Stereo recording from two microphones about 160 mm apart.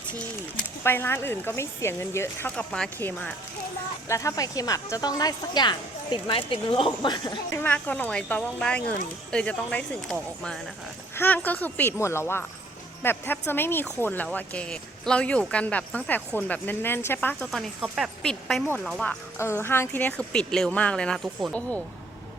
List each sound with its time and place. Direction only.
0.9 s speech: 15° left (ahead or behind)
7.5 s speech: 10° left (ahead or behind)
17.7 s speech: 5° right (ahead or behind)
19.4 s speech: 15° left (ahead or behind)